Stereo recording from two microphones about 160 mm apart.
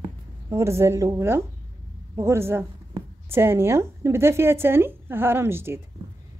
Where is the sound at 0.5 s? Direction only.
15° right (ahead or behind).